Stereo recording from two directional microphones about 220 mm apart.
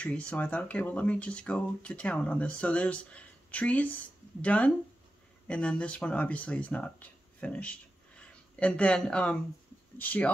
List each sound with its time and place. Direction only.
0.0 s speech: 5° left (ahead or behind)